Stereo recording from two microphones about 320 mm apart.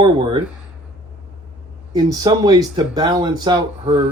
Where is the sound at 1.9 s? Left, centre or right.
Centre.